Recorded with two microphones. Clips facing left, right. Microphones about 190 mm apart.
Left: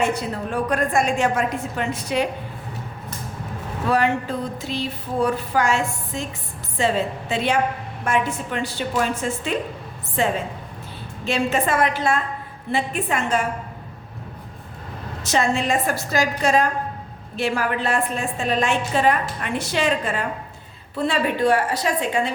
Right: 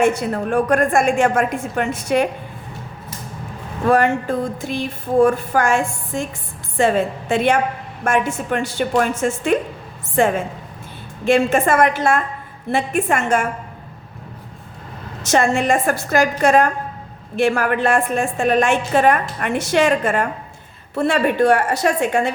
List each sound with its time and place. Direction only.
0.0 s a woman's voice: 50° right (ahead or behind)
3.8 s a woman's voice: 50° right (ahead or behind)
15.2 s a woman's voice: 50° right (ahead or behind)
21.0 s a woman's voice: 70° right (ahead or behind)
21.4 s a woman's voice: 50° right (ahead or behind)